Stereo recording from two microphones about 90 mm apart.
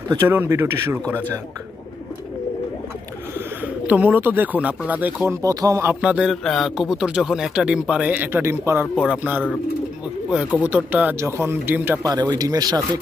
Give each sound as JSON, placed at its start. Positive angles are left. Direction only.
{"t": 0.3, "sound": "a man's voice", "side_deg": -25}
{"t": 3.6, "sound": "speech", "side_deg": -15}
{"t": 5.3, "sound": "speech", "side_deg": -40}
{"t": 5.9, "sound": "speech", "side_deg": -10}
{"t": 6.4, "sound": "speech", "side_deg": 0}
{"t": 8.9, "sound": "speech", "side_deg": -10}
{"t": 10.3, "sound": "speech", "side_deg": -15}
{"t": 11.1, "sound": "a man's voice", "side_deg": -30}
{"t": 12.0, "sound": "speech", "side_deg": -45}